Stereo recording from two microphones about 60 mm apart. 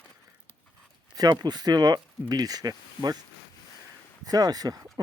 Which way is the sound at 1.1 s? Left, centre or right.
Right.